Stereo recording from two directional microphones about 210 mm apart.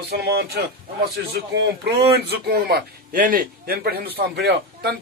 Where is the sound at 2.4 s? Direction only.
50° right (ahead or behind).